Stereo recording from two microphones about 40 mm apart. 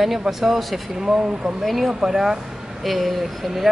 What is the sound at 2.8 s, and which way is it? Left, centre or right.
Speech, centre.